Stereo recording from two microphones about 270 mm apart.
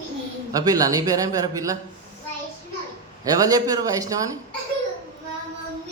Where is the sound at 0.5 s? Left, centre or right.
Centre.